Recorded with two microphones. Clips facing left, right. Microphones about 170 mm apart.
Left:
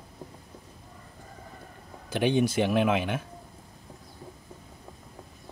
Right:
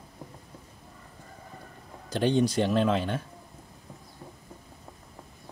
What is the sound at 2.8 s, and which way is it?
Speech, 70° left (ahead or behind).